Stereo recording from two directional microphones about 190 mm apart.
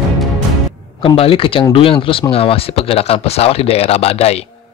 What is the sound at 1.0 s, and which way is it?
Speech, 30° left (ahead or behind).